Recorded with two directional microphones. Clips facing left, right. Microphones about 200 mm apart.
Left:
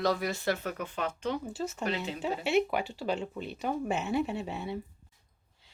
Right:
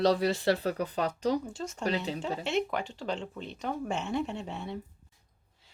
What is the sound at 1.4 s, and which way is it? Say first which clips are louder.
Speech: left 2 dB; 5° left (ahead or behind).